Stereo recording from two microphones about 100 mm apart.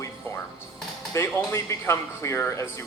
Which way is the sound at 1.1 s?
25° left (ahead or behind).